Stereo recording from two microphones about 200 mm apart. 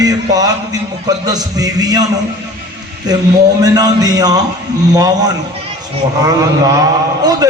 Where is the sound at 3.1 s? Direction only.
20° right (ahead or behind).